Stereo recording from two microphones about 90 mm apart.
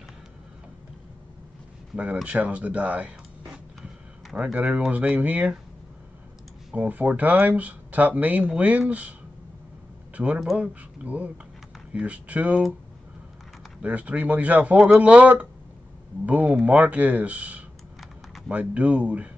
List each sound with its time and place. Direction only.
2.1 s speech: 10° right (ahead or behind)
6.7 s speech: 20° right (ahead or behind)
10.1 s speech: 15° right (ahead or behind)
13.8 s speech: 15° right (ahead or behind)